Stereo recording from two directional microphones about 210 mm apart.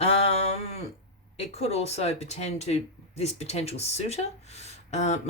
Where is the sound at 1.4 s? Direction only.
30° left (ahead or behind).